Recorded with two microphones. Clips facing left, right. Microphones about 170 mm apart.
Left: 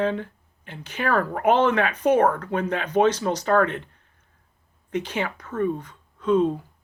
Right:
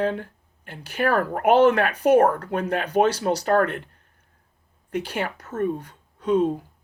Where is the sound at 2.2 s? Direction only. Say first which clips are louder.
Right 1 dB; 45° right (ahead or behind).